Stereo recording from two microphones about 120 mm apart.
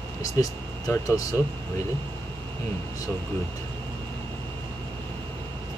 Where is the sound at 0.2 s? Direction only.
30° left (ahead or behind).